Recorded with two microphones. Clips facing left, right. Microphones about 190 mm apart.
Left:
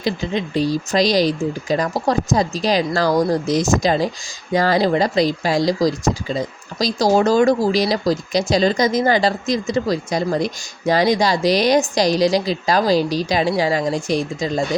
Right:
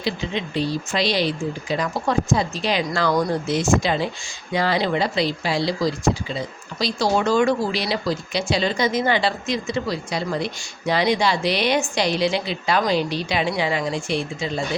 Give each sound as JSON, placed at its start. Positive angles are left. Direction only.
{"t": 0.0, "sound": "speech", "side_deg": 40}